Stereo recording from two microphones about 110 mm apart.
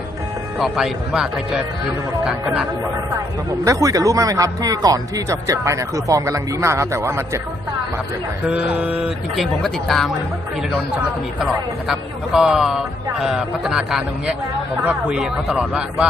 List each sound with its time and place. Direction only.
0.6 s a man's voice: 5° right (ahead or behind)
3.6 s speech: 30° right (ahead or behind)
8.7 s speech: 15° right (ahead or behind)
9.3 s a man's voice: centre (ahead or behind)
11.3 s a man's voice: 5° right (ahead or behind)